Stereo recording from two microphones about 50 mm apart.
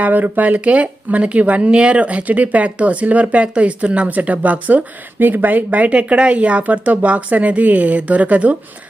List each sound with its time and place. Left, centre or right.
0.0 s speech: right